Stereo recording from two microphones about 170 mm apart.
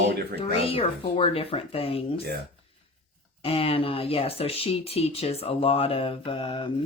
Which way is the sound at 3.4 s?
35° left (ahead or behind).